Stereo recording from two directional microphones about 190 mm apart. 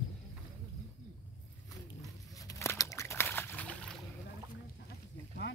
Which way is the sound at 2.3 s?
15° left (ahead or behind).